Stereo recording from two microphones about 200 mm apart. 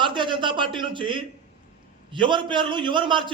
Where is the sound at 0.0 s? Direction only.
25° right (ahead or behind).